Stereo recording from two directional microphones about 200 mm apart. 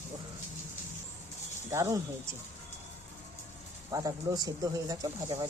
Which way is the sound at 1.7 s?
15° right (ahead or behind).